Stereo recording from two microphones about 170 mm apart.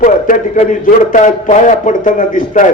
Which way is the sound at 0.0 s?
50° left (ahead or behind).